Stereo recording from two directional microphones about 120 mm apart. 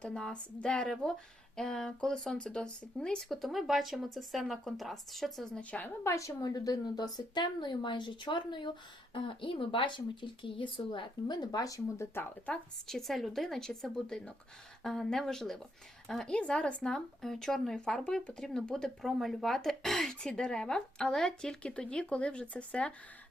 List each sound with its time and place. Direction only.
0.0 s speech: 5° left (ahead or behind)
5.7 s a woman's voice: 15° left (ahead or behind)
12.9 s speech: centre (ahead or behind)